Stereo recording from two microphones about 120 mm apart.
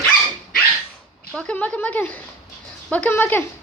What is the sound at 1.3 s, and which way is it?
Speech, 5° left (ahead or behind).